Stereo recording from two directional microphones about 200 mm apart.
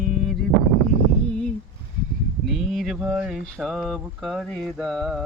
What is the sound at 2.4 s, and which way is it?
Speech, centre (ahead or behind).